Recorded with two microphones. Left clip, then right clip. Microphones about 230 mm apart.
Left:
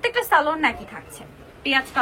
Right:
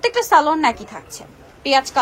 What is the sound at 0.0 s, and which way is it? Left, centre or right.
A woman's voice, right.